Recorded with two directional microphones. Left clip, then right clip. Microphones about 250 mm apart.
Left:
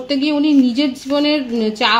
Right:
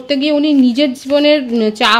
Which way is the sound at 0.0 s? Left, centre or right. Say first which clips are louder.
Right 3 dB; right.